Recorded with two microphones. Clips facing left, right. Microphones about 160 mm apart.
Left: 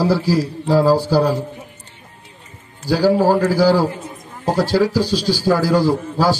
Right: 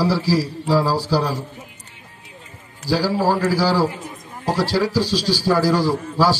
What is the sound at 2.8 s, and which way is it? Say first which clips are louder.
A man's voice: left 5 dB; 50° left (ahead or behind).